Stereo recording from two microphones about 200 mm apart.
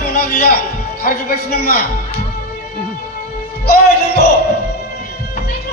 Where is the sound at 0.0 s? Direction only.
50° left (ahead or behind).